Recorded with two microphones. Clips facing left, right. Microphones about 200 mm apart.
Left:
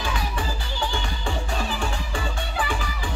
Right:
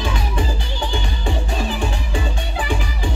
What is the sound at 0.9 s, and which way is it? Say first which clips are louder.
Music: right 4 dB; 20° right (ahead or behind).